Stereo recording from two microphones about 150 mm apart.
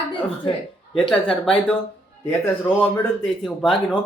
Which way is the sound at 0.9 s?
5° left (ahead or behind).